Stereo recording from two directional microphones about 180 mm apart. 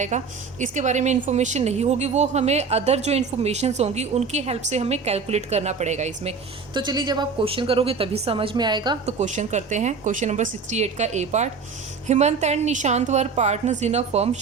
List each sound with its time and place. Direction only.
0.1 s a woman's voice: 40° right (ahead or behind)
6.7 s a woman's voice: 25° right (ahead or behind)
9.1 s a woman's voice: 40° right (ahead or behind)